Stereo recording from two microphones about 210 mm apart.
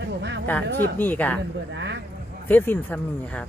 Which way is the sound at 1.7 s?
55° right (ahead or behind).